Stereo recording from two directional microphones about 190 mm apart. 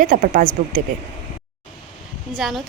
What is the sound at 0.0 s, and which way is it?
Speech, 45° right (ahead or behind).